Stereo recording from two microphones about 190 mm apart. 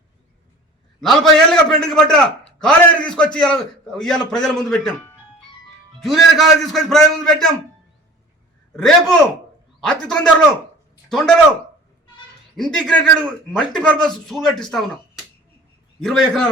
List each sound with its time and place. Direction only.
1.0 s a man's voice: centre (ahead or behind)
8.7 s a man's voice: centre (ahead or behind)
12.5 s speech: centre (ahead or behind)
16.0 s speech: 5° left (ahead or behind)